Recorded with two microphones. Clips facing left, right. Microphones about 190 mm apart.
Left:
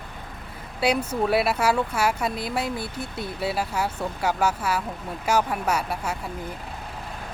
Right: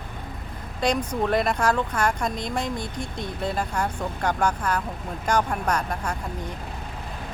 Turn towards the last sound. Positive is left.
turn(degrees=5)  # may be behind; listen again after turning